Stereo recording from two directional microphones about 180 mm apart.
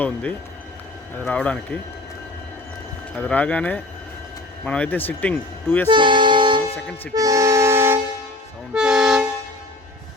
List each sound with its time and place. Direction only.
0.0 s speech: 5° left (ahead or behind)
3.2 s speech: 5° left (ahead or behind)
5.9 s music: 25° right (ahead or behind)
7.1 s vehicle: 20° right (ahead or behind)
8.7 s toot: 5° right (ahead or behind)